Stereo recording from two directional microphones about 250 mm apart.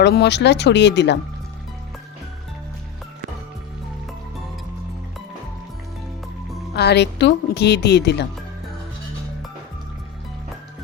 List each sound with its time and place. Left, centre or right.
0.0 s speech: left
6.7 s a woman's voice: left